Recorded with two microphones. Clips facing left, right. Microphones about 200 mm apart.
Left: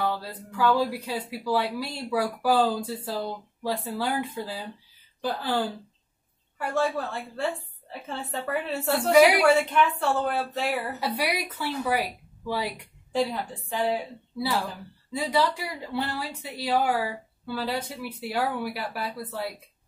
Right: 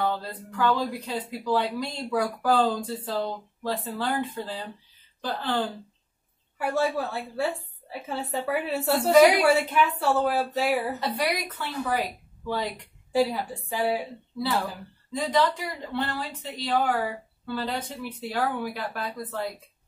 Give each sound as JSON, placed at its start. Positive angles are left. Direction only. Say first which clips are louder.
{"t": 0.0, "sound": "speech", "louder": "right 1 dB", "side_deg": 10}
{"t": 6.6, "sound": "a woman's voice", "louder": "right 1 dB", "side_deg": -10}
{"t": 9.1, "sound": "speech", "louder": "right 1 dB", "side_deg": 10}
{"t": 9.5, "sound": "speech", "louder": "left 1 dB", "side_deg": -5}
{"t": 11.0, "sound": "speech", "louder": "even", "side_deg": 10}
{"t": 13.1, "sound": "a woman's voice", "louder": "right 3 dB", "side_deg": -5}
{"t": 15.3, "sound": "speech", "louder": "right 1 dB", "side_deg": 10}